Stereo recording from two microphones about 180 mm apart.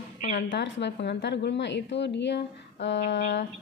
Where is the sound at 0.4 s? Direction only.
85° left.